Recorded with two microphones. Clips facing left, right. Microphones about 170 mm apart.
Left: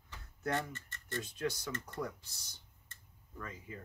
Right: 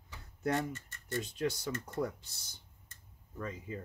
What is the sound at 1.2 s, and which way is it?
Speech, 25° right (ahead or behind).